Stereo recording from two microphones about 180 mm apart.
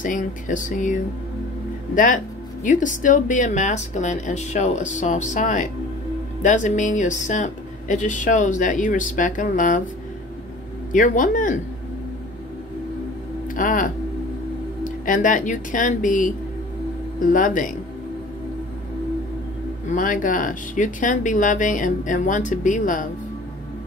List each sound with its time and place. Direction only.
0.0 s speech: 45° left (ahead or behind)
2.6 s speech: 45° left (ahead or behind)
10.9 s speech: 45° left (ahead or behind)
13.6 s speech: 50° left (ahead or behind)
19.9 s speech: 50° left (ahead or behind)